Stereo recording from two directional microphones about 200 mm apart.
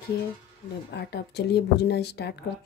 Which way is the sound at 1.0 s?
55° left (ahead or behind).